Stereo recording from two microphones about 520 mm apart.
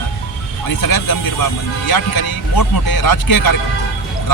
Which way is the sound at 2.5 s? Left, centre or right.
Left.